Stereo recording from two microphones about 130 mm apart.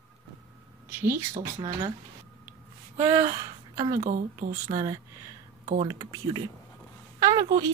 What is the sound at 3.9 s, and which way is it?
Speech, 80° right.